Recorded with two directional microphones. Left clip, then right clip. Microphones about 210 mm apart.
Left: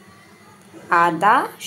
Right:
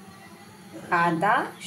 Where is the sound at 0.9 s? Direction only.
35° left (ahead or behind).